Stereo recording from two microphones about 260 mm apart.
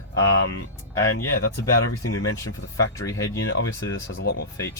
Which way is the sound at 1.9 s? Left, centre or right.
Left.